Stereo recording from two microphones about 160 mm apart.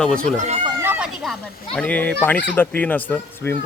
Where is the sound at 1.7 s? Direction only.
10° left (ahead or behind).